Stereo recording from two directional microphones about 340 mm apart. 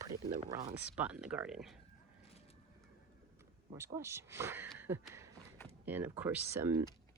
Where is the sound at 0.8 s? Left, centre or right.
Centre.